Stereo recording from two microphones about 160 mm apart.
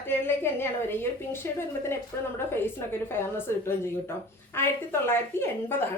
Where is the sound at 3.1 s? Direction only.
15° left (ahead or behind).